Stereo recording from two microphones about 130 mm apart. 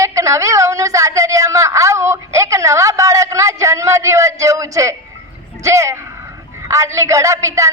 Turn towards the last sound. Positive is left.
turn(degrees=-25)  # may be behind; listen again after turning